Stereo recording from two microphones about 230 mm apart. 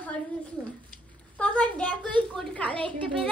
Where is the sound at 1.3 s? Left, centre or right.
Centre.